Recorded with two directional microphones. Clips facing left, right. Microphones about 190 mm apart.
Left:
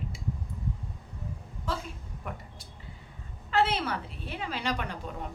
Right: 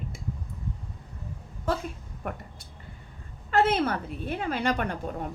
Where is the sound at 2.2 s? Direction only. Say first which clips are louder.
Right 5 dB; 60° right (ahead or behind).